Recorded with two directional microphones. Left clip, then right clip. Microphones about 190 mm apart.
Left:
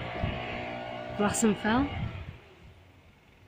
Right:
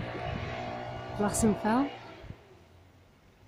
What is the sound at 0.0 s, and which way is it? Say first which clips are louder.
Music: left 2 dB; 45° left (ahead or behind).